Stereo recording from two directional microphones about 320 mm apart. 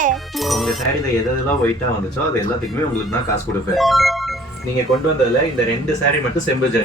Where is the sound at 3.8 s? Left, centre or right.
Centre.